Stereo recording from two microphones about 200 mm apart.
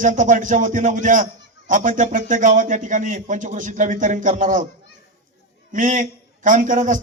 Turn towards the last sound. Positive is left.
turn(degrees=-40)  # may be behind; listen again after turning